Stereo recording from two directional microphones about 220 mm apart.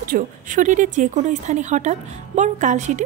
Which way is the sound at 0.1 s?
35° right (ahead or behind).